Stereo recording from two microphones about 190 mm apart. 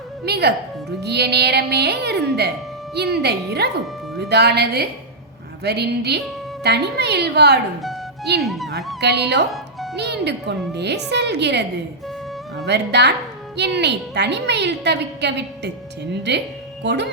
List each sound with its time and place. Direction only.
0.3 s a woman's voice: 60° right (ahead or behind)
8.4 s speech: centre (ahead or behind)
9.0 s a woman's voice: 60° right (ahead or behind)
12.6 s a woman's voice: 65° right (ahead or behind)